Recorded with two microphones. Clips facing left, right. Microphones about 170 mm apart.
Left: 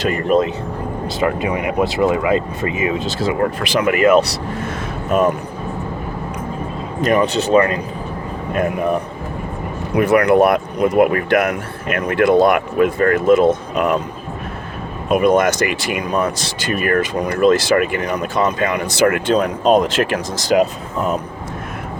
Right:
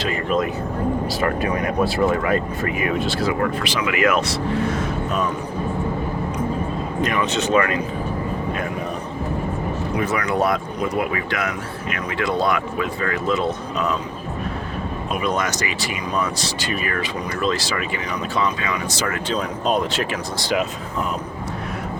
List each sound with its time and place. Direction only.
0.0 s speech: 45° left (ahead or behind)
1.2 s speech: 15° left (ahead or behind)
3.6 s speech: 50° left (ahead or behind)
4.0 s speech: 35° left (ahead or behind)
7.0 s speech: 40° left (ahead or behind)
9.9 s speech: 60° left (ahead or behind)
15.1 s speech: 50° left (ahead or behind)